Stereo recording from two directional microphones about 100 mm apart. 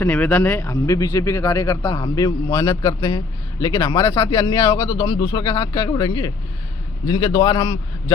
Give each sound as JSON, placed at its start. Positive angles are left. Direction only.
{"t": 0.0, "sound": "speech", "side_deg": 10}
{"t": 2.0, "sound": "a man's voice", "side_deg": 35}